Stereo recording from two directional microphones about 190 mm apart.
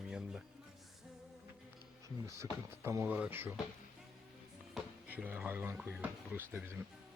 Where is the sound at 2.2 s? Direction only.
15° right (ahead or behind).